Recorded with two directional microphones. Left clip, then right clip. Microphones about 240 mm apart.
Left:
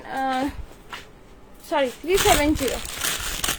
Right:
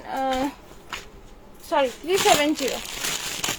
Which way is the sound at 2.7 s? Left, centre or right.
Centre.